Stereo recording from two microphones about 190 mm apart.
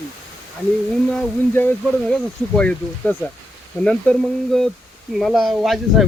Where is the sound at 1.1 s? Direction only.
5° left (ahead or behind).